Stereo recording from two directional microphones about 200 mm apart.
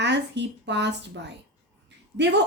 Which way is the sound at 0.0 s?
60° right (ahead or behind).